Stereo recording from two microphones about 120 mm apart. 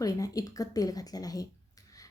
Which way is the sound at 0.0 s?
30° left (ahead or behind).